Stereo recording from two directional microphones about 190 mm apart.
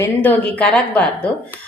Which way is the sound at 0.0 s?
10° left (ahead or behind).